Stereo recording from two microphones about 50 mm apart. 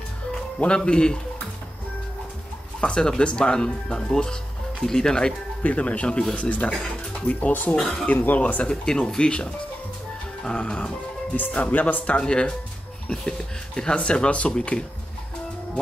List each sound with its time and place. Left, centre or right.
0.6 s speech: left
2.8 s speech: centre
5.6 s speech: left
7.7 s speech: centre
8.1 s speech: left
8.6 s speech: centre
13.7 s speech: centre